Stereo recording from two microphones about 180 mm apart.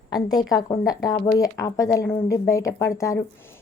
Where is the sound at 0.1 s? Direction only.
20° left (ahead or behind).